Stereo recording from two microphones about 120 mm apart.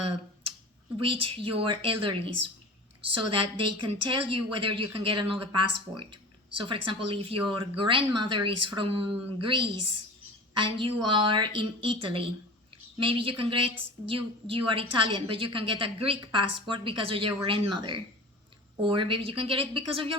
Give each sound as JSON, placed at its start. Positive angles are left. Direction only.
{"t": 0.9, "sound": "a woman's voice", "side_deg": -45}